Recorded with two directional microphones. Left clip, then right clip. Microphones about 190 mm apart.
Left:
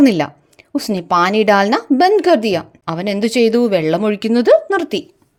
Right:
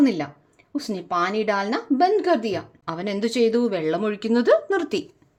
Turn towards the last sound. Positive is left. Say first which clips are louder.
# left 7 dB
turn(degrees=20)  # may be behind; listen again after turning